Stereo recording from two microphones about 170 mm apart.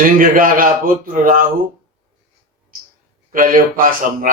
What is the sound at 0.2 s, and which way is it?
A man's voice, 55° right (ahead or behind).